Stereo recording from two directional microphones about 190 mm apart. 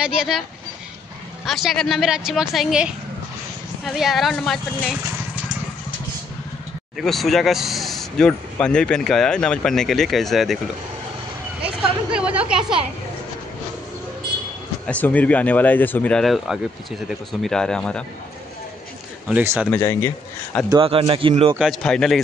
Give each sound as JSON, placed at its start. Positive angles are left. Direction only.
{"t": 0.0, "sound": "speech", "side_deg": -5}
{"t": 7.0, "sound": "speech", "side_deg": 0}
{"t": 11.6, "sound": "speech", "side_deg": -5}
{"t": 14.9, "sound": "speech", "side_deg": 10}
{"t": 19.2, "sound": "speech", "side_deg": -10}
{"t": 19.7, "sound": "speech", "side_deg": 10}
{"t": 20.7, "sound": "speech", "side_deg": -25}
{"t": 21.5, "sound": "speech", "side_deg": 0}